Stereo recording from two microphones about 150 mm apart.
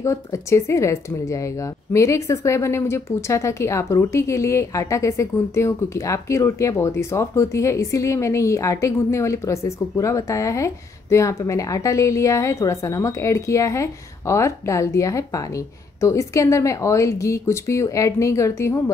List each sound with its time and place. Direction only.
0.0 s speech: 20° left (ahead or behind)